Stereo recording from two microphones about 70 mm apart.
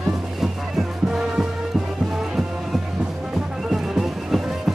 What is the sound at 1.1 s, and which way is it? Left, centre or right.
Music, centre.